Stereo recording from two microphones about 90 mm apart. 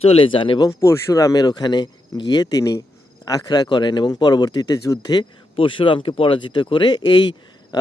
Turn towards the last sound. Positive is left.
turn(degrees=55)  # may be behind; listen again after turning